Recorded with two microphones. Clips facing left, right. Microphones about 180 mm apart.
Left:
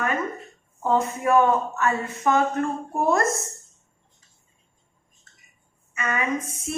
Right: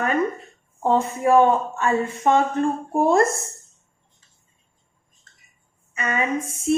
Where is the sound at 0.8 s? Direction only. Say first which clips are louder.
Right 3 dB; 30° right (ahead or behind).